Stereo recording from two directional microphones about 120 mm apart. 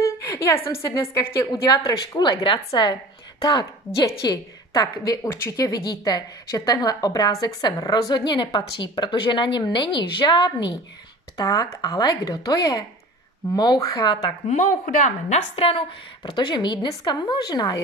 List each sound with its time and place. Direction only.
0.0 s a sound: 25° left (ahead or behind)
0.7 s a woman's voice: 25° left (ahead or behind)
14.5 s a woman's voice: 90° left
15.5 s a woman's voice: 50° left (ahead or behind)
16.3 s a woman's voice: 40° left (ahead or behind)